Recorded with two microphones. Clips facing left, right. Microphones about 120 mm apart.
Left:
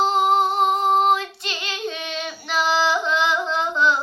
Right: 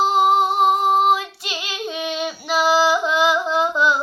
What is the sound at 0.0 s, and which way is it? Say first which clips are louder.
Female singing: right 2 dB; 10° right (ahead or behind).